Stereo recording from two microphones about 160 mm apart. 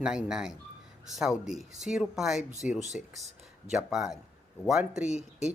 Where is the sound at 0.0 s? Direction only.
5° right (ahead or behind).